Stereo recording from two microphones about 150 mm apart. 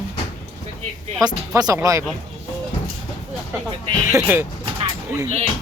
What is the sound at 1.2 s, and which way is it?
Speech, 25° right (ahead or behind).